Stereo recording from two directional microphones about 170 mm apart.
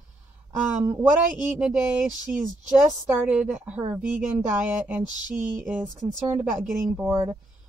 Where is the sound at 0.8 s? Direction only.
15° right (ahead or behind).